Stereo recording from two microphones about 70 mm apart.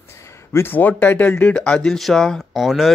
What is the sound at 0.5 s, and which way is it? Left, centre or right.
Speech, left.